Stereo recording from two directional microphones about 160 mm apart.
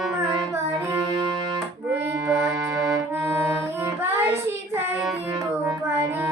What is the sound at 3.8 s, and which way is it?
Child singing, 15° right (ahead or behind).